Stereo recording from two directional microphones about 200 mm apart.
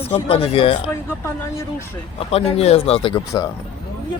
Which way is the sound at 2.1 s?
30° left (ahead or behind).